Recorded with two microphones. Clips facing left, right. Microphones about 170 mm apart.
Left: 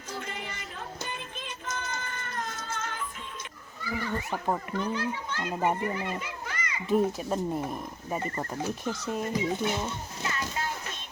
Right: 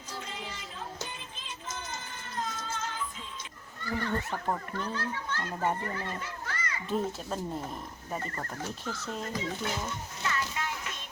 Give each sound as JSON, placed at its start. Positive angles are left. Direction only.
{"t": 0.3, "sound": "music", "side_deg": 60}
{"t": 3.8, "sound": "a child's voice", "side_deg": 10}